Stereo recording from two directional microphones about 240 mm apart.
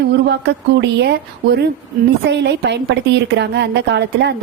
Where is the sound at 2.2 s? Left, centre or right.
Right.